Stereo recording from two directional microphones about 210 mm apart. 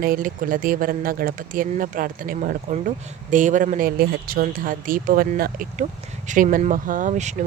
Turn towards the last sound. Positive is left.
turn(degrees=-35)  # may be behind; listen again after turning